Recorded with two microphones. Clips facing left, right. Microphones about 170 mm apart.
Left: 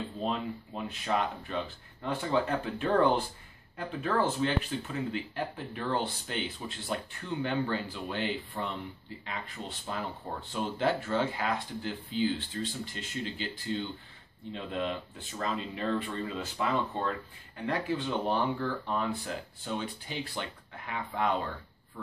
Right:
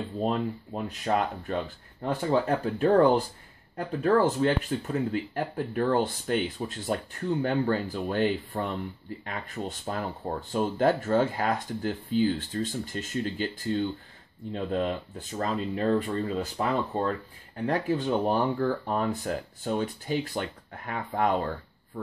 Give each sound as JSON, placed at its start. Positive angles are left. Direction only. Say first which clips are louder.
{"t": 0.2, "sound": "speech", "louder": "right 6 dB", "side_deg": -45}